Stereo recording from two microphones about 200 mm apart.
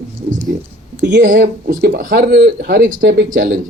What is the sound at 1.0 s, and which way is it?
Speech, 60° right (ahead or behind).